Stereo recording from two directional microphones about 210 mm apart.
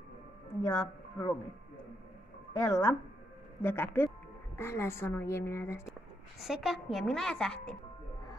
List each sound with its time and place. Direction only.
0.7 s speech: 15° left (ahead or behind)
2.6 s a woman's voice: 15° left (ahead or behind)
6.4 s a woman's voice: centre (ahead or behind)